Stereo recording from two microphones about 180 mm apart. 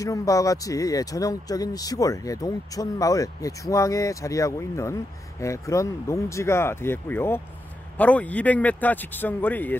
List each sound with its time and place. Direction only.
0.0 s speech: 20° left (ahead or behind)